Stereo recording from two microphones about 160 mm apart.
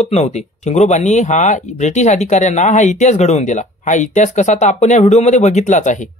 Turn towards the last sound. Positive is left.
turn(degrees=50)  # may be behind; listen again after turning